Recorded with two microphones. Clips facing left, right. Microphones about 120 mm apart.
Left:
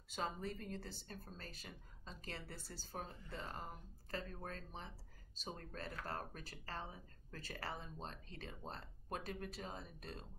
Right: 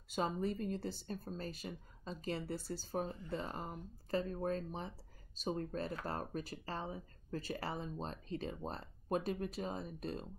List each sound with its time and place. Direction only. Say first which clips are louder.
0.4 s speech: right 8 dB; 20° right (ahead or behind)